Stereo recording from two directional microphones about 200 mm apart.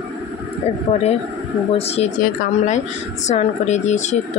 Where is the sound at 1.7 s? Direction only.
30° left (ahead or behind).